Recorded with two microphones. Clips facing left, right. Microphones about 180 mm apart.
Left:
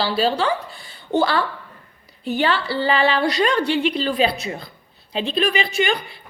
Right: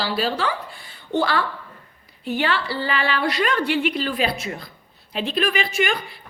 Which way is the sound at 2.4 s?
30° left (ahead or behind).